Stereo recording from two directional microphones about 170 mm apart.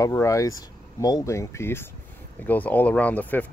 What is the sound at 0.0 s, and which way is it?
Speech, 20° left (ahead or behind).